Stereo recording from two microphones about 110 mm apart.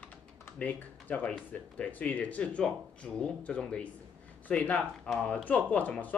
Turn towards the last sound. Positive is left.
turn(degrees=15)  # may be behind; listen again after turning